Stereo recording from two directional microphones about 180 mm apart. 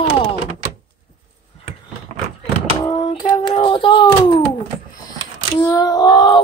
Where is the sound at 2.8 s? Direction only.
30° left (ahead or behind).